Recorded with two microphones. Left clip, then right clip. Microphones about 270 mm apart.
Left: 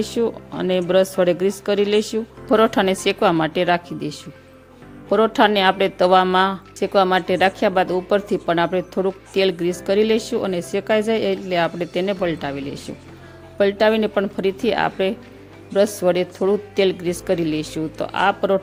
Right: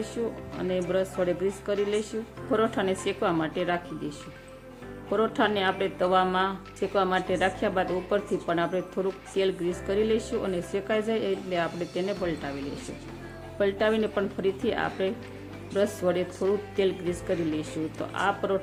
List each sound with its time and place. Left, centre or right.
0.2 s a woman's voice: left
13.6 s speech: left